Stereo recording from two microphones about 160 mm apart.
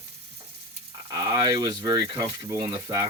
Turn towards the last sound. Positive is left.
turn(degrees=-25)  # may be behind; listen again after turning